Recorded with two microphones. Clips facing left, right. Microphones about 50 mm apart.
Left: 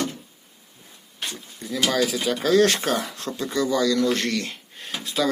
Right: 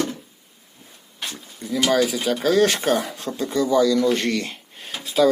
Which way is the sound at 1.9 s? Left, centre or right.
Centre.